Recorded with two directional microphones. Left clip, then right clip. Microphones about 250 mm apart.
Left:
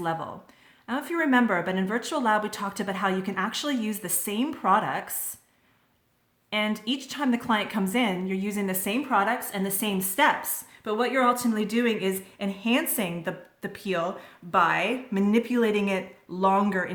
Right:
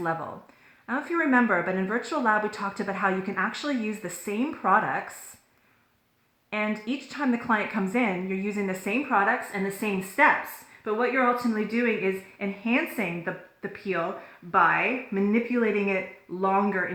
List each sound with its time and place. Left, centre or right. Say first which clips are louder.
0.0 s speech: even; left
6.5 s speech: left 2 dB; left